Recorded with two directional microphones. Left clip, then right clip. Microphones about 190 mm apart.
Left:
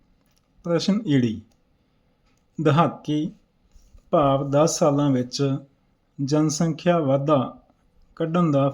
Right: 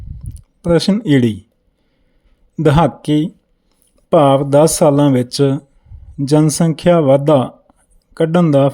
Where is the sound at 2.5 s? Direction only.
50° right (ahead or behind).